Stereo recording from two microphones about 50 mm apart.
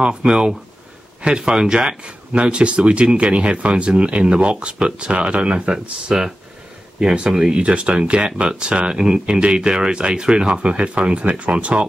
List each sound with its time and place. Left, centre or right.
0.0 s speech: centre
7.6 s speech: right